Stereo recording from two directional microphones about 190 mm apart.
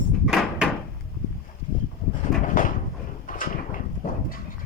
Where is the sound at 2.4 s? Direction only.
45° left (ahead or behind).